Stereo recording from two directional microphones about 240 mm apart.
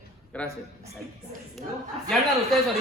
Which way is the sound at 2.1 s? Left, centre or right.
Centre.